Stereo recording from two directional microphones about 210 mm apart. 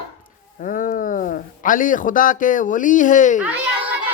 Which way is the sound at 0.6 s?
40° left (ahead or behind).